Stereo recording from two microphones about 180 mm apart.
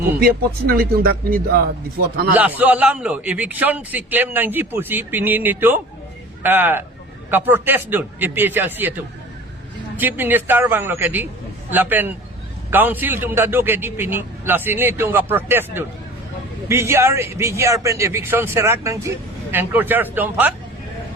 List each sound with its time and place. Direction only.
0.0 s speech: 55° right (ahead or behind)
2.3 s a man's voice: 10° right (ahead or behind)
10.0 s a man's voice: 10° right (ahead or behind)